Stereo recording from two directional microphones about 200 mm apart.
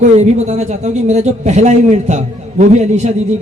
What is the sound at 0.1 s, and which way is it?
A man's voice, 35° right (ahead or behind).